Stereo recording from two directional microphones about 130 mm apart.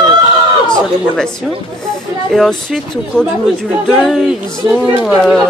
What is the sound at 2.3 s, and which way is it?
Speech, centre (ahead or behind).